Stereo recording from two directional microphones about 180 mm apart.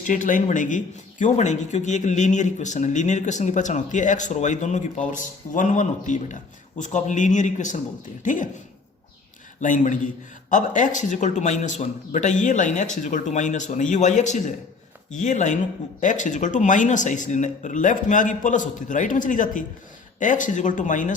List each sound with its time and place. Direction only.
0.0 s a man's voice: 45° left (ahead or behind)
9.6 s a man's voice: 45° left (ahead or behind)